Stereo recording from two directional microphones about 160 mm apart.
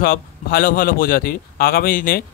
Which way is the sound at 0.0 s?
65° left (ahead or behind).